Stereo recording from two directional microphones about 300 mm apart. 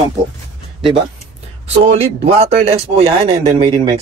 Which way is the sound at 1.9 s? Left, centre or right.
Centre.